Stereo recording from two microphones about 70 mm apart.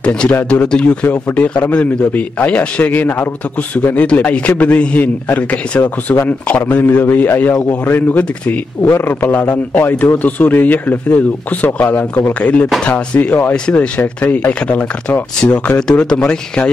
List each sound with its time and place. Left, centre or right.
0.0 s a man's voice: centre
12.4 s a man's voice: centre